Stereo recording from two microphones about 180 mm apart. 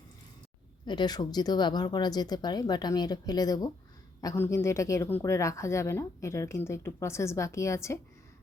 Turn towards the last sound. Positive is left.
turn(degrees=15)  # may be behind; listen again after turning